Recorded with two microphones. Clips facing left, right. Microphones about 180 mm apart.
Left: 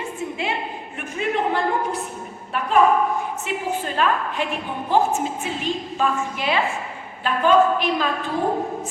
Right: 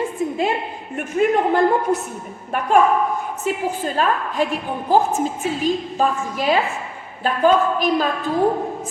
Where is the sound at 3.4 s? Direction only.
40° right (ahead or behind).